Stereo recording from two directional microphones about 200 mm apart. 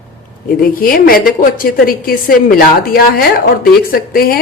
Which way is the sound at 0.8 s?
45° left (ahead or behind).